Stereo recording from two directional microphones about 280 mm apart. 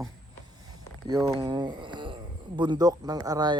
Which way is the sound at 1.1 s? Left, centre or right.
Centre.